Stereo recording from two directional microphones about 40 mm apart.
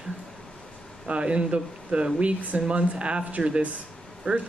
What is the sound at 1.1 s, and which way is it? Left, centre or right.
Speech, right.